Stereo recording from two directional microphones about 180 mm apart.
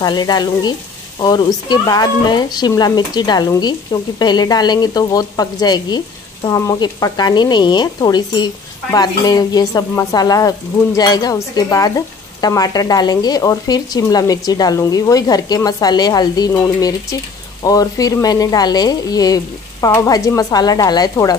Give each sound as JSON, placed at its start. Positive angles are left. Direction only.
{"t": 0.0, "sound": "speech", "side_deg": 25}